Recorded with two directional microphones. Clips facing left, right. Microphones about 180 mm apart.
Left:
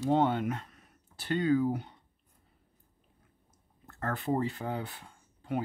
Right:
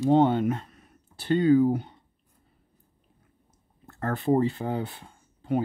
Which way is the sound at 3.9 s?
30° right (ahead or behind).